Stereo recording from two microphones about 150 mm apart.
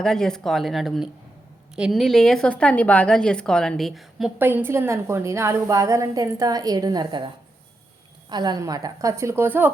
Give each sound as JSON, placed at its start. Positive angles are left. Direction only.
{"t": 0.0, "sound": "a woman's voice", "side_deg": 5}
{"t": 4.4, "sound": "a woman's voice", "side_deg": -15}
{"t": 8.3, "sound": "a woman's voice", "side_deg": -30}